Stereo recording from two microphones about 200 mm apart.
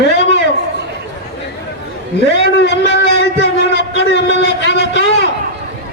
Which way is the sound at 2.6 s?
60° left (ahead or behind).